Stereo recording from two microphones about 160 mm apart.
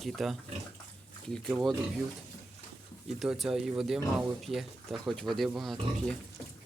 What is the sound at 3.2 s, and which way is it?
Speech, centre (ahead or behind).